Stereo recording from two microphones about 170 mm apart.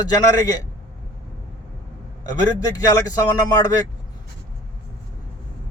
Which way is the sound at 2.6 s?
20° left (ahead or behind).